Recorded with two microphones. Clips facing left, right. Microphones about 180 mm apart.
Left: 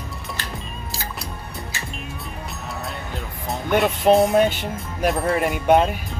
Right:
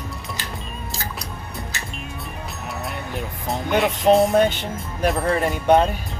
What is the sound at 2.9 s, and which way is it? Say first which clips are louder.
Music: right 2 dB; 20° right (ahead or behind).